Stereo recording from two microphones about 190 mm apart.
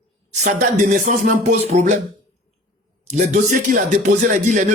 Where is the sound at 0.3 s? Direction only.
40° right (ahead or behind).